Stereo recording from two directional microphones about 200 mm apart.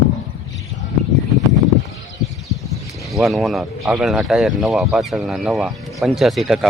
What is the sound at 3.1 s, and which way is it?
Speech, centre (ahead or behind).